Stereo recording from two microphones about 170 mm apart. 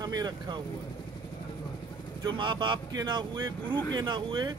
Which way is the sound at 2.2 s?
30° right (ahead or behind).